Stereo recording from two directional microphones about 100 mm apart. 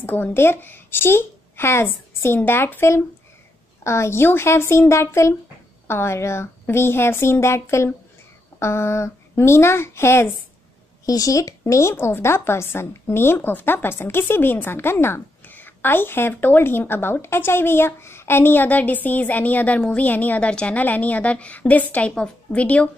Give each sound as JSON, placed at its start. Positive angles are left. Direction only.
{"t": 0.0, "sound": "a woman's voice", "side_deg": 20}
{"t": 11.1, "sound": "a woman's voice", "side_deg": 35}